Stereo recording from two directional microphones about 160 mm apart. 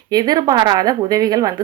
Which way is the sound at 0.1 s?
25° right (ahead or behind).